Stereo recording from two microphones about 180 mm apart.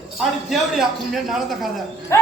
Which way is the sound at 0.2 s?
Centre (ahead or behind).